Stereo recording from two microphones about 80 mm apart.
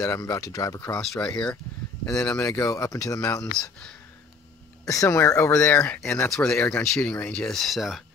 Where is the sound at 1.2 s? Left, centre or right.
Centre.